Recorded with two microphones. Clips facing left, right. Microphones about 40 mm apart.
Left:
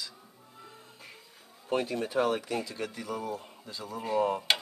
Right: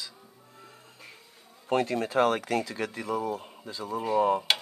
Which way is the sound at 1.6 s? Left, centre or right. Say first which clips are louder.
Right 4 dB; right.